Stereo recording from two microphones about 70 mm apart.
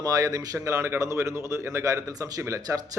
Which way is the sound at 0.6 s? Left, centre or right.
Right.